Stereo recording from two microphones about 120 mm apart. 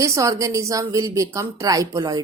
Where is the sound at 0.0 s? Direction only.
25° right (ahead or behind).